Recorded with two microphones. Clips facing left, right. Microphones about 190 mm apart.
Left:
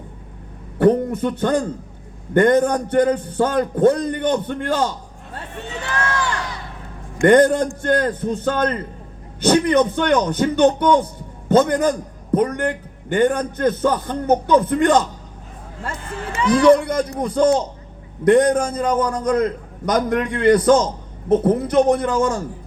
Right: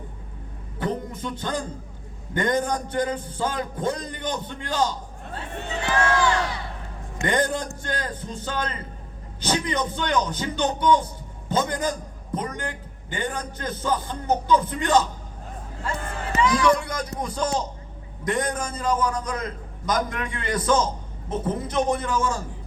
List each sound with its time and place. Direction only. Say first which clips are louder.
0.8 s a man's voice: left 13 dB; 60° left (ahead or behind)
7.2 s a man's voice: left 11 dB; 60° left (ahead or behind)
16.4 s a man's voice: left 8 dB; 60° left (ahead or behind)